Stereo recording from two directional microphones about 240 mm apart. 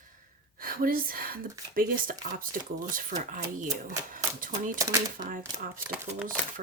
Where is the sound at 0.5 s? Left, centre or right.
Right.